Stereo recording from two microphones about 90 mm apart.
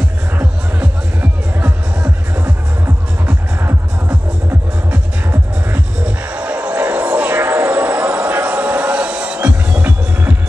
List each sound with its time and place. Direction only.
0.4 s music: 15° right (ahead or behind)
3.6 s music: 25° right (ahead or behind)